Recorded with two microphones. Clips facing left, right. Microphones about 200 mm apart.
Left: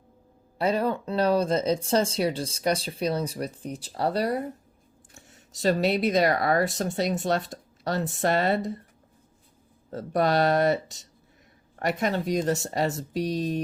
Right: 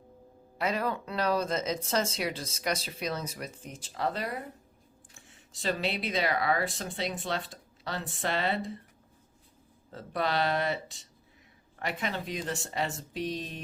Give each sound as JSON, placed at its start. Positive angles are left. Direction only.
{"t": 0.6, "sound": "speech", "side_deg": 30}
{"t": 9.9, "sound": "speech", "side_deg": 40}